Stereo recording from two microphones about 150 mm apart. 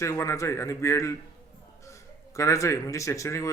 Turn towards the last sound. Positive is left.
turn(degrees=20)  # may be behind; listen again after turning